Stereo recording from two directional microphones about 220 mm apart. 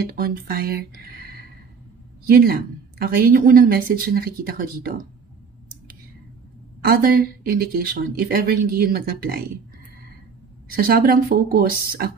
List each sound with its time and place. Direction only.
0.0 s a woman's voice: 40° right (ahead or behind)
6.8 s a woman's voice: 40° right (ahead or behind)
10.7 s speech: 40° right (ahead or behind)